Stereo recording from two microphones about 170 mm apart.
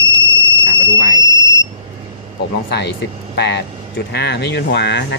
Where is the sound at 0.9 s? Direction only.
80° left.